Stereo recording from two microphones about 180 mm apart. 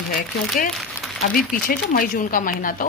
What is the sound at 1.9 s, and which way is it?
Speech, 50° left (ahead or behind).